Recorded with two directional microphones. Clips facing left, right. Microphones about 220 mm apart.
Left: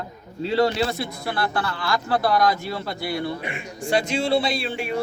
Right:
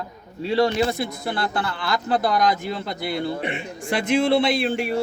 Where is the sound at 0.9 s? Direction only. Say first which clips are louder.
Right 2 dB; 20° right (ahead or behind).